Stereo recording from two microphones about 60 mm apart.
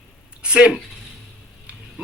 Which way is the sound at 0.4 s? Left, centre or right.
Centre.